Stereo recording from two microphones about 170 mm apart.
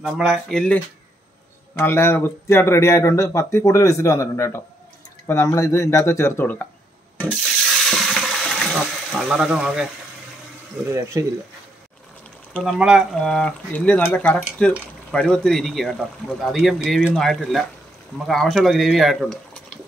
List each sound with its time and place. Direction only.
0.0 s speech: 5° right (ahead or behind)
1.8 s speech: 15° left (ahead or behind)
7.9 s water: centre (ahead or behind)
10.9 s speech: 15° right (ahead or behind)
12.6 s speech: 5° right (ahead or behind)